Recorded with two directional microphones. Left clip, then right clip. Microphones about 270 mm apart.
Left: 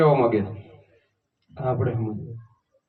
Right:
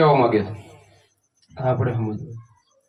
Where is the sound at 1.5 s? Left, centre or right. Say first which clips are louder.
Right 4 dB; right.